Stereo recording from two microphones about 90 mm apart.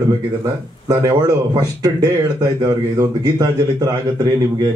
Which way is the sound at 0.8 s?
40° right (ahead or behind).